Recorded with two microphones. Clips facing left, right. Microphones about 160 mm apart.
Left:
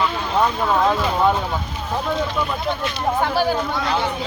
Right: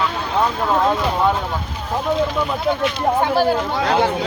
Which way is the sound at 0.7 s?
5° right (ahead or behind).